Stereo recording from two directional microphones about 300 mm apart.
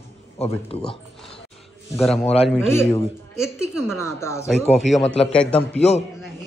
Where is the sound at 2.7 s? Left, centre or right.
Centre.